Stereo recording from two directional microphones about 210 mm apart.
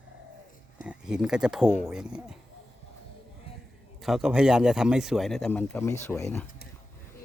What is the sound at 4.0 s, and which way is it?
Speech, centre (ahead or behind).